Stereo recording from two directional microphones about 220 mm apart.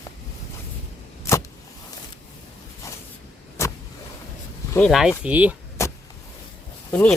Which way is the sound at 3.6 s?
10° left (ahead or behind).